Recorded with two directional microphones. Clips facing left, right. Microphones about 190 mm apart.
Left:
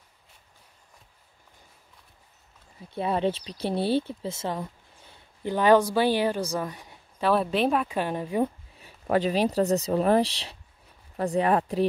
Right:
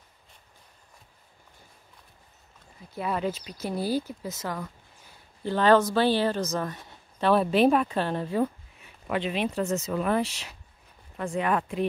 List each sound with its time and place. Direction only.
2.9 s speech: 30° left (ahead or behind)
5.4 s a woman's voice: 15° left (ahead or behind)
8.0 s a woman's voice: 10° left (ahead or behind)
8.7 s speech: 40° left (ahead or behind)